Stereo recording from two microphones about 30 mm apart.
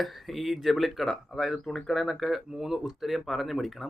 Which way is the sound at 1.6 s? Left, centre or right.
Centre.